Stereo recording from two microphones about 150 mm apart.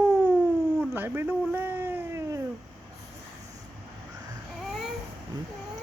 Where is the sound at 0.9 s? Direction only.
15° right (ahead or behind).